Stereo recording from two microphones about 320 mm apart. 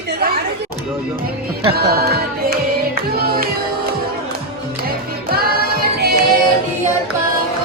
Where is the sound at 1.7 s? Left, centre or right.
Right.